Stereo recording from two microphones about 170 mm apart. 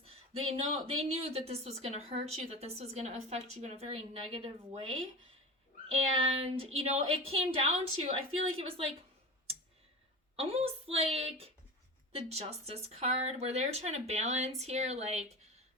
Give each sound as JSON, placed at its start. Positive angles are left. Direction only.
{"t": 0.0, "sound": "speech", "side_deg": -35}
{"t": 10.3, "sound": "speech", "side_deg": -35}